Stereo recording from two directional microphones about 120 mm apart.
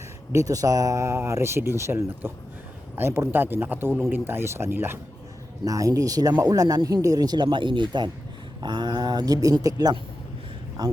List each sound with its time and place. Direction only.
0.3 s speech: 30° right (ahead or behind)